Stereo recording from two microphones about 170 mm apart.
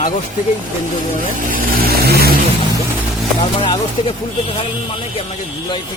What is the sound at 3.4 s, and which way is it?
Speech, 25° left (ahead or behind).